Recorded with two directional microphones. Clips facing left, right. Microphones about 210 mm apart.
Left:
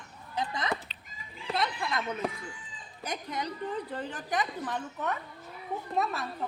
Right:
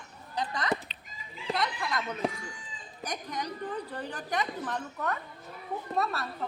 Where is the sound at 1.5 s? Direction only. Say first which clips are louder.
Even; 25° left (ahead or behind).